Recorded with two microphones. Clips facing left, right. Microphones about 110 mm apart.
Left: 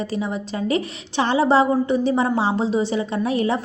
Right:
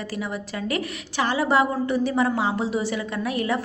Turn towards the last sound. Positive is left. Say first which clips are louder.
# left 4 dB
turn(degrees=25)  # may be behind; listen again after turning